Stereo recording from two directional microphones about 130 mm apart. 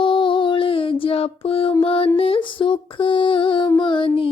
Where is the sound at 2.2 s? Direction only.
45° left (ahead or behind).